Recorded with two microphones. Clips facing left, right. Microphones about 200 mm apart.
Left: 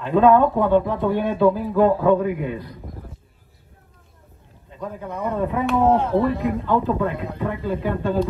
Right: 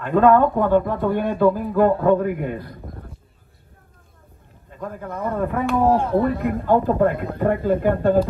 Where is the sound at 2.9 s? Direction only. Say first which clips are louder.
Even; centre (ahead or behind).